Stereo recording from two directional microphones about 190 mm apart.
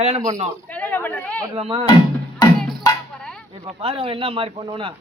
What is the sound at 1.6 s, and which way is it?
Speech, 25° right (ahead or behind).